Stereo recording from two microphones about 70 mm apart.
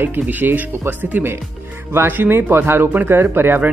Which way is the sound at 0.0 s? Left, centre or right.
Right.